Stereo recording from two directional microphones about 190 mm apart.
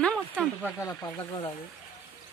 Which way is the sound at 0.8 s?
15° left (ahead or behind).